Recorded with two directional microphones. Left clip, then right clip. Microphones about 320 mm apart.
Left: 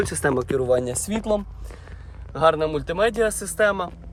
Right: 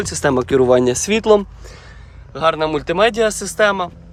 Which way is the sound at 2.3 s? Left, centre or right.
Centre.